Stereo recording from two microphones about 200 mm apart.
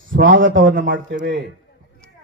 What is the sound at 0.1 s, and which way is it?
Speech, 70° right (ahead or behind).